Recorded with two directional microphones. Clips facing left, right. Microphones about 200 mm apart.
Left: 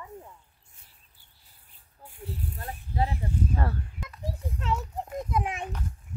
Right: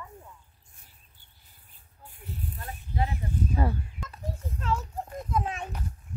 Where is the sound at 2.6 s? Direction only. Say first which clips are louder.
Left 2 dB; 30° left (ahead or behind).